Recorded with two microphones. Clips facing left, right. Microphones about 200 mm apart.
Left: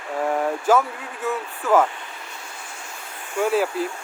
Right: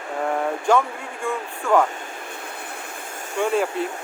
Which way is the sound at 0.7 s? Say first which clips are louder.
Even; 5° left (ahead or behind).